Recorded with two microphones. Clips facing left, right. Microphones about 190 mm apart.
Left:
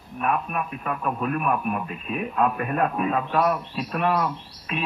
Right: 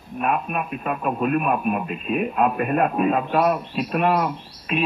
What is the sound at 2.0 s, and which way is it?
Speech, 70° right (ahead or behind).